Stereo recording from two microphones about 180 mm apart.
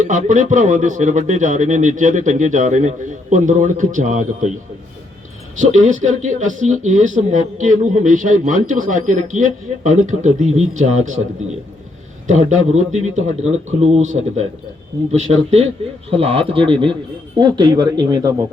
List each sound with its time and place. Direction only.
0.0 s speech: 45° right (ahead or behind)
5.5 s a man's voice: 45° right (ahead or behind)
12.3 s a man's voice: 40° right (ahead or behind); by 18.3 s 20° right (ahead or behind)